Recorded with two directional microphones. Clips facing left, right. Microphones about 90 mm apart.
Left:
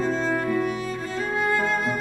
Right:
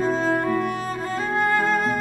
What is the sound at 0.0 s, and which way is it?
Music, 45° right (ahead or behind).